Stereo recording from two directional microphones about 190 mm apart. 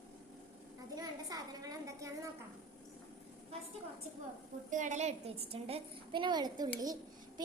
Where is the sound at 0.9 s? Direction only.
20° right (ahead or behind).